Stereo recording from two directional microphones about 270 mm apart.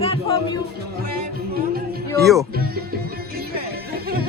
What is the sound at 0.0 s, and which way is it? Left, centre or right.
Music, left.